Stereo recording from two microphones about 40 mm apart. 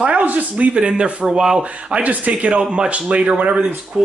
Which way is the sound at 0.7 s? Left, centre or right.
Right.